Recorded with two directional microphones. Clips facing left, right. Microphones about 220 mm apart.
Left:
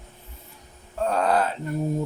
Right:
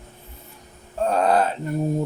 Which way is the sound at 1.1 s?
25° right (ahead or behind).